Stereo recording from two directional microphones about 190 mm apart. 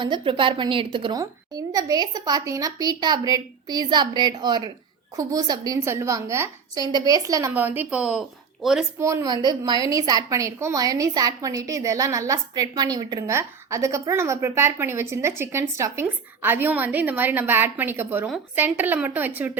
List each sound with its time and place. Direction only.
0.0 s a woman's voice: 25° right (ahead or behind); by 8.8 s centre (ahead or behind)
9.0 s a woman's voice: 15° right (ahead or behind)